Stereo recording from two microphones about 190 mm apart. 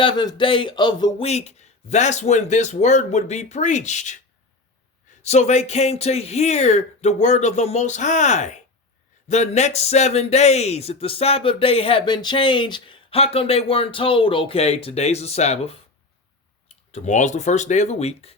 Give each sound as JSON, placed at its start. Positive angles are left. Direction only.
{"t": 0.0, "sound": "a sound", "side_deg": 25}
{"t": 1.3, "sound": "a man's voice", "side_deg": 35}
{"t": 5.2, "sound": "a man's voice", "side_deg": 35}